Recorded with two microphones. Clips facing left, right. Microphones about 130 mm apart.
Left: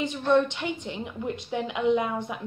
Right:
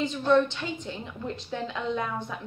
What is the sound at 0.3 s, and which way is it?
A woman's voice, 20° left (ahead or behind).